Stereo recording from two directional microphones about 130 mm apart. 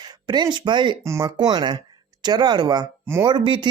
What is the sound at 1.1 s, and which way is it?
Speech, 20° right (ahead or behind).